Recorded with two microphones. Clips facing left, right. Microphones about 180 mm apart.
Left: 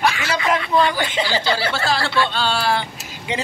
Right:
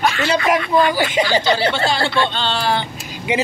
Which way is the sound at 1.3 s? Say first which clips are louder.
Right 4 dB; 20° right (ahead or behind).